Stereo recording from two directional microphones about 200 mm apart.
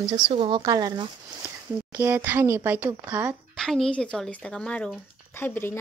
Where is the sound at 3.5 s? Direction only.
Centre (ahead or behind).